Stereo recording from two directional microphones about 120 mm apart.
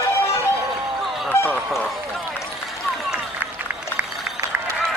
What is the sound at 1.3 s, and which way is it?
Speech, 15° left (ahead or behind).